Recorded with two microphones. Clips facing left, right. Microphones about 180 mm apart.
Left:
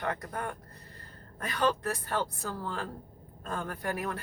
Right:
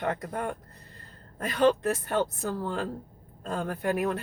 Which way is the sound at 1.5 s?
20° right (ahead or behind).